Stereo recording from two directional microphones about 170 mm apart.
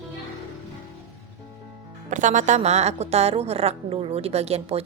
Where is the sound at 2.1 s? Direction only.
45° right (ahead or behind).